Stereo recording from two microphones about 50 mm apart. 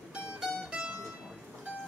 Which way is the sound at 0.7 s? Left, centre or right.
Centre.